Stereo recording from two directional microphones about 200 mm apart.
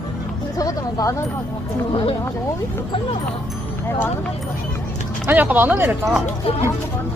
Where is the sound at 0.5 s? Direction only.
20° left (ahead or behind).